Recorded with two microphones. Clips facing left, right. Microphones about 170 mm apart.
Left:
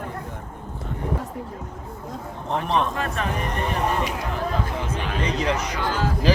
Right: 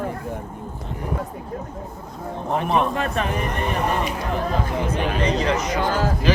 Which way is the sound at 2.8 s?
20° right (ahead or behind).